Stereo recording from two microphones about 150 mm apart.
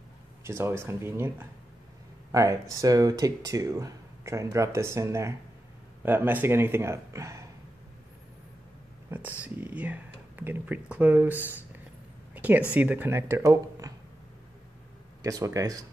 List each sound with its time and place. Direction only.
0.4 s speech: 15° right (ahead or behind)
2.8 s speech: 25° right (ahead or behind)
9.1 s speech: 10° right (ahead or behind)
15.2 s speech: 20° right (ahead or behind)